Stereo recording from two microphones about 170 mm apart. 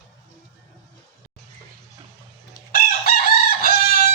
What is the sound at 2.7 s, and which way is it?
Chicken, 60° left (ahead or behind).